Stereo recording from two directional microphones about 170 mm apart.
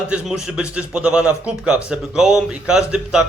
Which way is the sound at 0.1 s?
5° right (ahead or behind).